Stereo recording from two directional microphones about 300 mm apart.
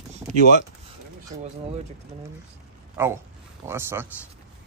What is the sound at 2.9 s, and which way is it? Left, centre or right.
Speech, centre.